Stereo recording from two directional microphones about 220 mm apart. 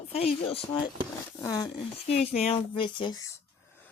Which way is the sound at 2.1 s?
30° left (ahead or behind).